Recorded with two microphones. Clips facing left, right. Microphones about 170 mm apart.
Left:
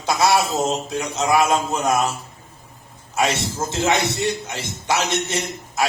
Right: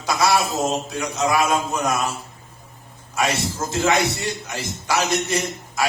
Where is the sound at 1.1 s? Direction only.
25° left (ahead or behind).